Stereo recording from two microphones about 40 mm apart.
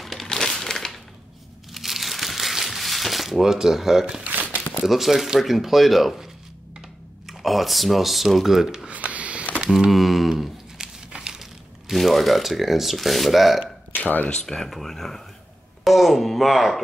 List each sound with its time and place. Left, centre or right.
0.0 s crushing: centre
1.7 s crumpling: centre
4.8 s speech: centre
8.8 s a sound: right
9.7 s speech: centre
10.8 s crumpling: centre
11.1 s a sound: centre
11.9 s speech: centre
13.9 s speech: left
14.3 s speech: centre